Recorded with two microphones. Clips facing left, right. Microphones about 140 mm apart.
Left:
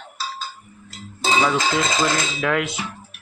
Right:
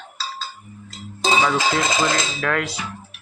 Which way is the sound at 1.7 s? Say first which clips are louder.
Even; 15° right (ahead or behind).